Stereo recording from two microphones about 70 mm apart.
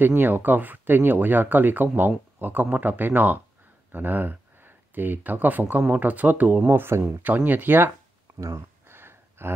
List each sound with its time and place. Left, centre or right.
0.0 s speech: right
8.4 s speech: right
8.8 s a sound: right